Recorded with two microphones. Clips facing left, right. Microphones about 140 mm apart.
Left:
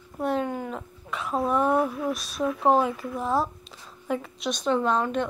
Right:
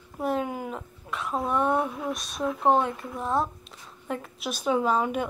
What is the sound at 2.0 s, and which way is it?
Speech, centre (ahead or behind).